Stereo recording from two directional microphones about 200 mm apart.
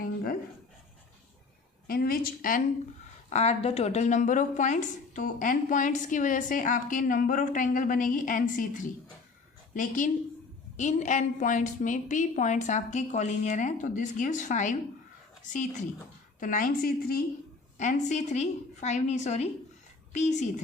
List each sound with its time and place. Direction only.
0.0 s dog: 50° left (ahead or behind)
1.9 s a woman's voice: 45° left (ahead or behind)
3.2 s a woman's voice: 35° left (ahead or behind)